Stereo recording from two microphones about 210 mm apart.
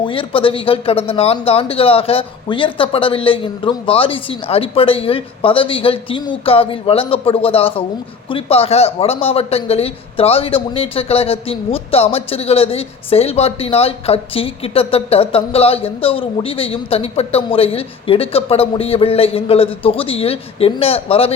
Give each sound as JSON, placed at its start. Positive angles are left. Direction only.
{"t": 0.0, "sound": "speech", "side_deg": 25}